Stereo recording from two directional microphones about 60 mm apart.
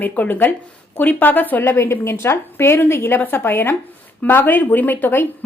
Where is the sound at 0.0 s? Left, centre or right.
Left.